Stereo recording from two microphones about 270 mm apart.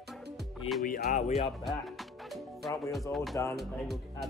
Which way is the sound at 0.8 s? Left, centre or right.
Left.